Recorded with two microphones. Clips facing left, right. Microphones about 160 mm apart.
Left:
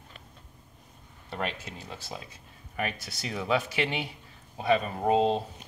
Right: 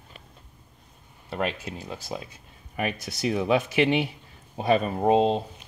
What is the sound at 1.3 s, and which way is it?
Speech, 15° right (ahead or behind).